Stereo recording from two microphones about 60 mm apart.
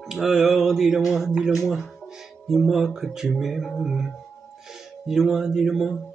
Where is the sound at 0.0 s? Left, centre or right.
Centre.